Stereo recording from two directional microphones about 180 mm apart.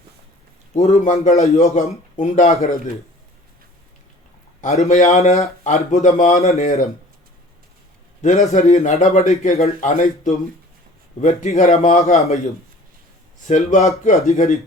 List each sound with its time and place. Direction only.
0.7 s a man's voice: 40° left (ahead or behind)
4.6 s speech: 35° left (ahead or behind)
8.2 s a man's voice: 45° left (ahead or behind)
13.5 s a man's voice: 45° left (ahead or behind)